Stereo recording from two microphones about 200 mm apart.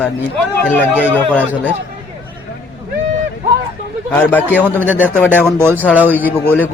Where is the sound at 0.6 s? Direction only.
10° left (ahead or behind).